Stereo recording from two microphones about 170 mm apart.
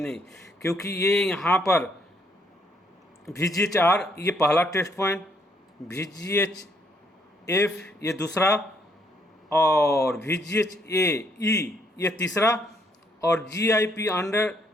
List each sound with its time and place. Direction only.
0.6 s a man's voice: 15° left (ahead or behind)
1.1 s speech: 5° left (ahead or behind)
3.2 s a man's voice: 20° left (ahead or behind)
13.6 s a man's voice: 20° left (ahead or behind)